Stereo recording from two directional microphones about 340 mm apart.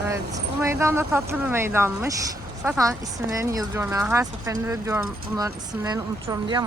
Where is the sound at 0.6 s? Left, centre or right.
Centre.